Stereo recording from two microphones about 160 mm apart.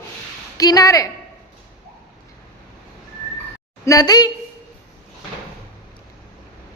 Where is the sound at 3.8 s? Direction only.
20° left (ahead or behind).